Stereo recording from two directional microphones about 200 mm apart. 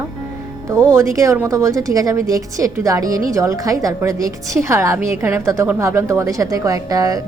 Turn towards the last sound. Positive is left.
turn(degrees=-15)  # may be behind; listen again after turning